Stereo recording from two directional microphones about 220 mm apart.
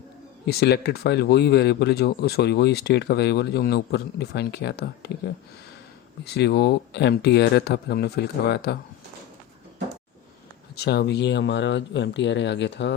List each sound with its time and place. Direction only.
0.4 s speech: 45° left (ahead or behind)
6.2 s speech: 50° left (ahead or behind)
10.8 s speech: 50° left (ahead or behind)